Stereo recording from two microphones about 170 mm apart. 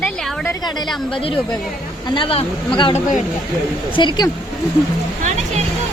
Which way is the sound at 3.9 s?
25° left (ahead or behind).